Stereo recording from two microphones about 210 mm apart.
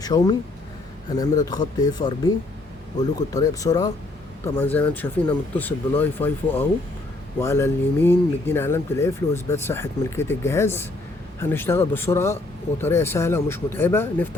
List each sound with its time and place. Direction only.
0.0 s speech: 20° left (ahead or behind)